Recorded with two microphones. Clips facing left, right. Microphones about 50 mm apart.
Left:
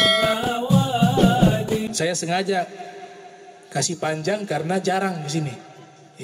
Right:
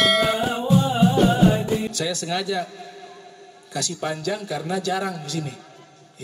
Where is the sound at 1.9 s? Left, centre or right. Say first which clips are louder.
Left 3 dB; left.